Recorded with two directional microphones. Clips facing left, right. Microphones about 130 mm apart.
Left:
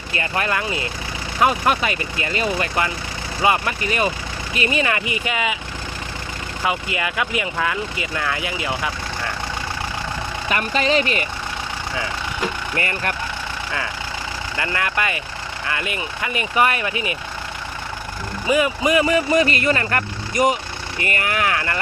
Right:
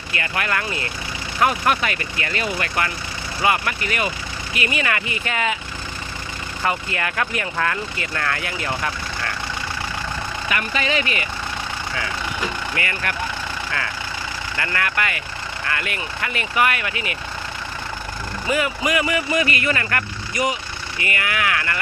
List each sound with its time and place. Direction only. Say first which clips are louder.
0.1 s speech: left 2 dB; 25° left (ahead or behind)
6.6 s speech: left 1 dB; 10° left (ahead or behind)
10.5 s speech: left 4 dB; 35° left (ahead or behind)
12.7 s speech: left 2 dB; 30° left (ahead or behind)
14.6 s speech: left 1 dB; 20° left (ahead or behind)
18.4 s speech: left 4 dB; 20° left (ahead or behind)
20.3 s speech: left 5 dB; 45° left (ahead or behind); by 21.8 s 30° left (ahead or behind)